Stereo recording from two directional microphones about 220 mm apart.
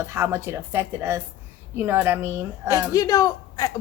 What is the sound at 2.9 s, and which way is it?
Speech, 15° left (ahead or behind).